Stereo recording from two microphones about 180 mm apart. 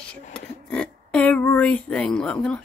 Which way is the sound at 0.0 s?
5° left (ahead or behind).